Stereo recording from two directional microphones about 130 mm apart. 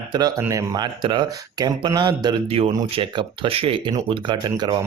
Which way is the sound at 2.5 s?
50° right (ahead or behind).